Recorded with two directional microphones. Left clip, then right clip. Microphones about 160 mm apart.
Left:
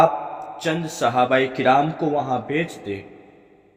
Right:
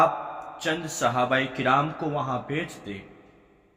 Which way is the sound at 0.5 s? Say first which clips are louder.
Left 3 dB; 40° left (ahead or behind).